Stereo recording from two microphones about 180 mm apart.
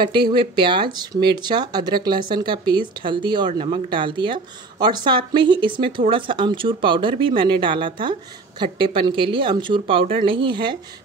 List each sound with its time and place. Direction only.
0.0 s speech: 25° right (ahead or behind)